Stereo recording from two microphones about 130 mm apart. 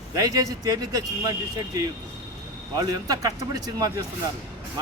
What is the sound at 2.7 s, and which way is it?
A man's voice, 30° right (ahead or behind).